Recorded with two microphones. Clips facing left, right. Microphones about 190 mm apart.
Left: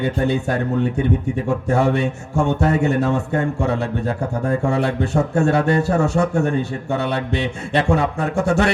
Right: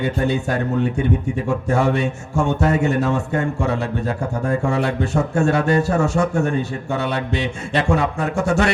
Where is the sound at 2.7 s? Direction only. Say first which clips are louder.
Left 1 dB; 35° left (ahead or behind).